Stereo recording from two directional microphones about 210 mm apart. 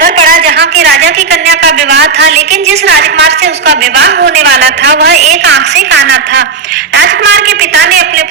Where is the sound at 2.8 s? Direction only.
55° right (ahead or behind).